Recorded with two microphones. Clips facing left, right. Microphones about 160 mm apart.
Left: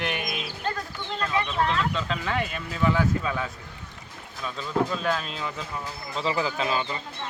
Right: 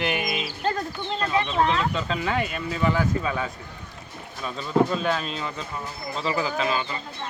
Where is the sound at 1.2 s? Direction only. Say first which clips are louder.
Right 3 dB; 25° right (ahead or behind).